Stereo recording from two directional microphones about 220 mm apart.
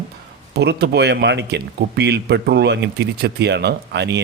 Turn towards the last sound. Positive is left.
turn(degrees=-50)  # may be behind; listen again after turning